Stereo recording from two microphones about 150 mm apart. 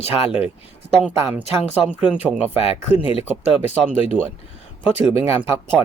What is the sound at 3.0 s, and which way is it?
Speech, 40° left (ahead or behind).